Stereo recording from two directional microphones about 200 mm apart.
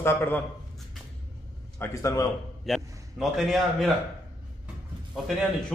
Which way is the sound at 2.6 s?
Centre (ahead or behind).